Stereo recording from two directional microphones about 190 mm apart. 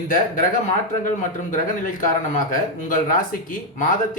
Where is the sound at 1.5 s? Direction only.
45° left (ahead or behind).